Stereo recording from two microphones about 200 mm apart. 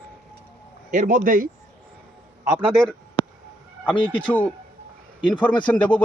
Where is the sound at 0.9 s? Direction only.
40° right (ahead or behind).